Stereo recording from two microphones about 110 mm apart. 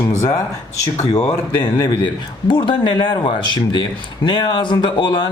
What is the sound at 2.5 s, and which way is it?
A man's voice, 50° left (ahead or behind).